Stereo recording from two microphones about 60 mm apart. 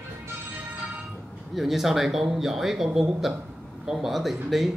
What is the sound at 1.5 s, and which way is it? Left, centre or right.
Speech, centre.